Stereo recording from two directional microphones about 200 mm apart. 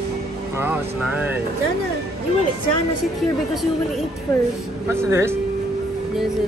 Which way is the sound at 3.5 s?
Centre (ahead or behind).